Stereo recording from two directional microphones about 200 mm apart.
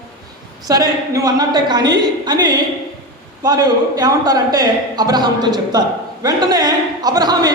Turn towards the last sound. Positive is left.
turn(degrees=-20)  # may be behind; listen again after turning